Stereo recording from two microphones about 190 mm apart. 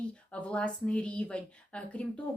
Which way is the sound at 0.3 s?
5° left (ahead or behind).